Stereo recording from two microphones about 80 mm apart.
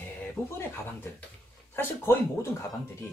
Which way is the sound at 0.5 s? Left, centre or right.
Left.